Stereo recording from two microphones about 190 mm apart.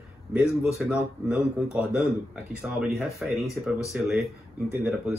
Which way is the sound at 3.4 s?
15° left (ahead or behind).